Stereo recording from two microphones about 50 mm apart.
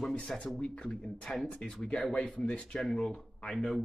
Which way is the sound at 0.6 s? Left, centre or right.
Left.